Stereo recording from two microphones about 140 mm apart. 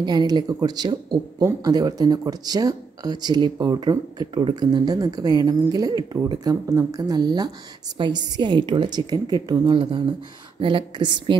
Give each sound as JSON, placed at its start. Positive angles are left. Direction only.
{"t": 0.0, "sound": "a woman's voice", "side_deg": -30}